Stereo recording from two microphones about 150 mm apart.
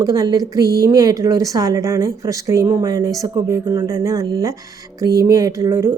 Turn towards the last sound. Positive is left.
turn(degrees=-20)  # may be behind; listen again after turning